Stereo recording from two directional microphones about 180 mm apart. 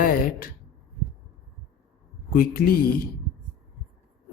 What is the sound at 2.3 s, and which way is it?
Speech, 55° left (ahead or behind).